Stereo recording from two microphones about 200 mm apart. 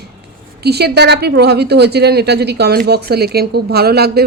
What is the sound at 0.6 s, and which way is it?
A woman's voice, 55° right (ahead or behind).